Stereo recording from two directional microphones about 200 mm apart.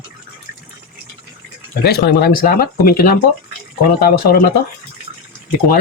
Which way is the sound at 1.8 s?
50° left (ahead or behind).